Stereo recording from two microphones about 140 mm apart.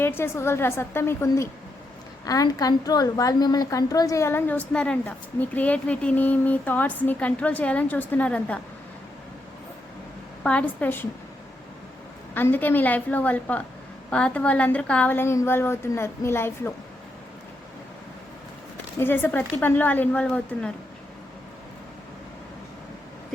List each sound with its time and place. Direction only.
0.0 s a woman's voice: 15° left (ahead or behind)
10.4 s a woman's voice: 10° left (ahead or behind)
12.3 s a woman's voice: 15° left (ahead or behind)
18.9 s a woman's voice: 15° left (ahead or behind)